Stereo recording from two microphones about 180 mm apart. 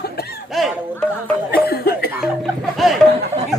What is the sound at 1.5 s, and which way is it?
Cough, 60° left (ahead or behind).